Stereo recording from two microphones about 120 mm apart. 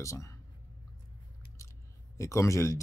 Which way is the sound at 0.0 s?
25° left (ahead or behind).